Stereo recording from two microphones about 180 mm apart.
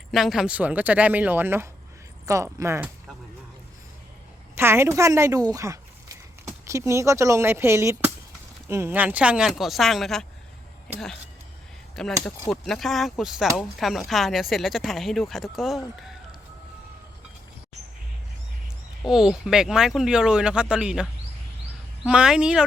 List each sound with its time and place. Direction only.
0.1 s speech: centre (ahead or behind)
4.5 s speech: 15° right (ahead or behind)
11.9 s speech: centre (ahead or behind)
19.0 s speech: 5° right (ahead or behind)